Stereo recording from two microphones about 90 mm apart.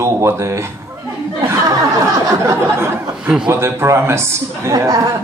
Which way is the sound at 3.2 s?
10° right (ahead or behind).